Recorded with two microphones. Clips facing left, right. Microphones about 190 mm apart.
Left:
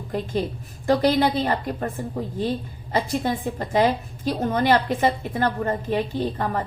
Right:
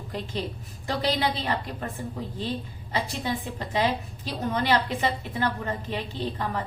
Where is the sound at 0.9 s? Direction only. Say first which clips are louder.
Left 8 dB; 50° left (ahead or behind).